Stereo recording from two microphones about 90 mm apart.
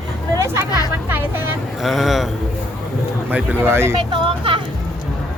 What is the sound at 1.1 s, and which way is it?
Speech, 25° right (ahead or behind).